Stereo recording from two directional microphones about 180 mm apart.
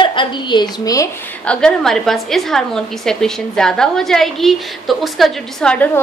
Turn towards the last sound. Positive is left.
turn(degrees=10)  # may be behind; listen again after turning